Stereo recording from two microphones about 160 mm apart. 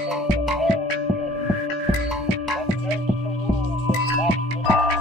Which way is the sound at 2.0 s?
Centre (ahead or behind).